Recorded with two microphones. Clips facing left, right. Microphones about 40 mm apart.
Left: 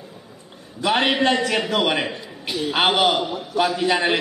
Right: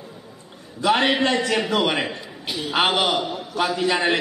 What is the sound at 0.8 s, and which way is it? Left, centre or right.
Speech, left.